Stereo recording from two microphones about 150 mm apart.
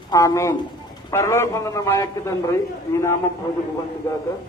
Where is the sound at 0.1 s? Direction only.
20° left (ahead or behind).